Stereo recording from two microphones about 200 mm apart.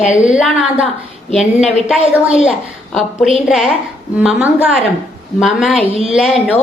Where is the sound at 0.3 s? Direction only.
5° right (ahead or behind).